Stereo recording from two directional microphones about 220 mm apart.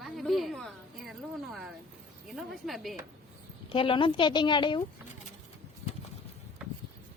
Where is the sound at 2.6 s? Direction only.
Centre (ahead or behind).